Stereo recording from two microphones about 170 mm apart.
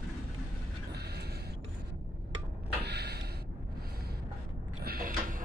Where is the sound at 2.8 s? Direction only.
75° right (ahead or behind).